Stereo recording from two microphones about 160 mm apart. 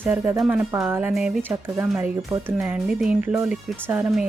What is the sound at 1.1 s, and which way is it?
Speech, centre (ahead or behind).